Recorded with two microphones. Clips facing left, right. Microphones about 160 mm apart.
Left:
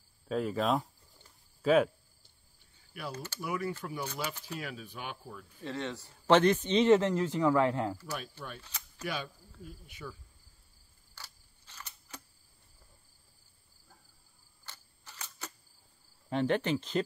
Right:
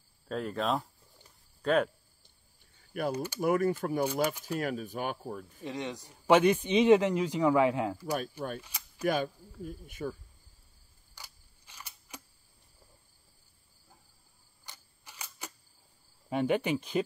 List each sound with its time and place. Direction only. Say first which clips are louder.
0.3 s cricket: left 1 dB; centre (ahead or behind)
1.6 s speech: left 2 dB; 5° left (ahead or behind)
3.1 s a man's voice: right 7 dB; 15° right (ahead or behind)
3.3 s speech: right 8 dB; 50° right (ahead or behind)
5.6 s a man's voice: left 2 dB; 15° right (ahead or behind)
8.1 s speech: right 7 dB; 45° right (ahead or behind)
8.5 s a sound: right 4 dB; 10° right (ahead or behind)
9.0 s speech: right 9 dB; 50° right (ahead or behind)
11.1 s camera: even; 10° right (ahead or behind)
14.7 s camera: even; 10° right (ahead or behind)
16.3 s a man's voice: right 1 dB; 10° right (ahead or behind)